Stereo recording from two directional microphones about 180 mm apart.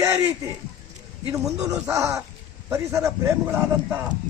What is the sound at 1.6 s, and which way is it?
A man's voice, 15° right (ahead or behind).